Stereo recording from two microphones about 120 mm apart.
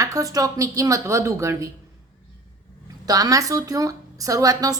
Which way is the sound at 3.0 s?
30° right (ahead or behind).